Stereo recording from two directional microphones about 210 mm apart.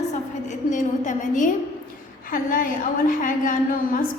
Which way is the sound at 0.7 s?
35° left (ahead or behind).